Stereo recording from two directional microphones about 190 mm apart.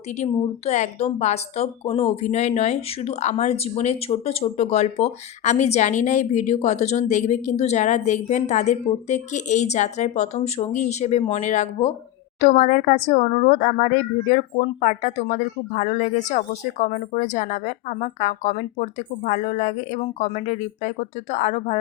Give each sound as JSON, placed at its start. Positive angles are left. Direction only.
{"t": 0.2, "sound": "a woman's voice", "side_deg": 35}